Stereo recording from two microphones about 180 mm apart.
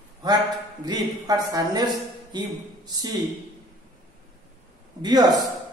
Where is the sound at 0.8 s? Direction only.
20° right (ahead or behind).